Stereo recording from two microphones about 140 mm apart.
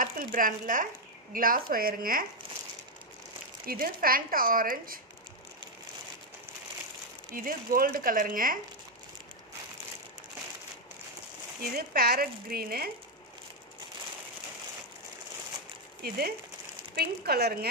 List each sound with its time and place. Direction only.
0.0 s speech: 75° right (ahead or behind)
1.3 s speech: 90° right
3.6 s speech: 90° right
7.3 s speech: 90° right
11.6 s speech: 90° right
16.0 s speech: 90° right